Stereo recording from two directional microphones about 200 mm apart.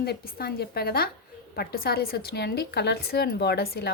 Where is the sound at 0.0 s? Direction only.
50° left (ahead or behind).